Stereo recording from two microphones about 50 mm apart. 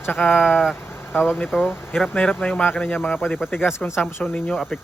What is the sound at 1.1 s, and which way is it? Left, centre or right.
Speech, left.